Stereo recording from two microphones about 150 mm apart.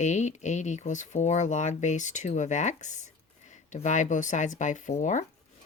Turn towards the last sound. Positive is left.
turn(degrees=55)  # may be behind; listen again after turning